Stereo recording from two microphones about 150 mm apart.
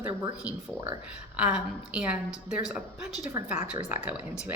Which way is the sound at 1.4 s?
5° right (ahead or behind).